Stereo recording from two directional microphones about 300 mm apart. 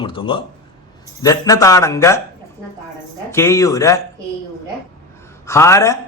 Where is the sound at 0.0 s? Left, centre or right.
Centre.